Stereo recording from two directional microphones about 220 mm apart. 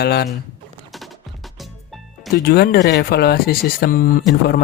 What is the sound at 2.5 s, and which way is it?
Speech, 45° left (ahead or behind).